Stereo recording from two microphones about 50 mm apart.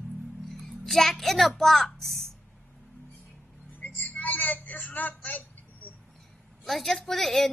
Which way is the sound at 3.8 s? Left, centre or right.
Left.